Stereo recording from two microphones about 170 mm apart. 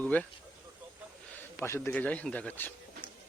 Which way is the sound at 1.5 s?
15° left (ahead or behind).